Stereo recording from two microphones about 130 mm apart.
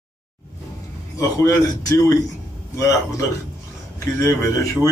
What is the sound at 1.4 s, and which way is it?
Speech, 25° left (ahead or behind).